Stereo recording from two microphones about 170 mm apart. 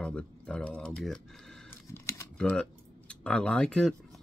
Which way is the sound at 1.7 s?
15° left (ahead or behind).